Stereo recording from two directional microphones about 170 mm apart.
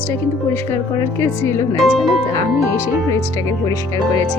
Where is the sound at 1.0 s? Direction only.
15° left (ahead or behind).